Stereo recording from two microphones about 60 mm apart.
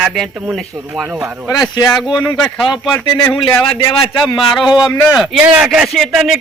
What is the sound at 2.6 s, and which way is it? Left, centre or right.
Speech, centre.